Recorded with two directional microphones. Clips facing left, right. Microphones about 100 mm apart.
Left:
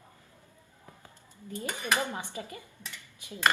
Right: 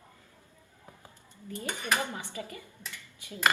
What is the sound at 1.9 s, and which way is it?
Speech, 20° left (ahead or behind).